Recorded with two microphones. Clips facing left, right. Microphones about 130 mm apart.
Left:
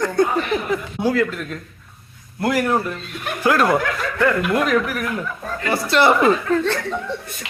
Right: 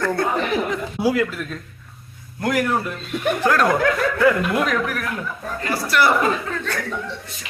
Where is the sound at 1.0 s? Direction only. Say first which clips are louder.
Right 1 dB; 5° right (ahead or behind).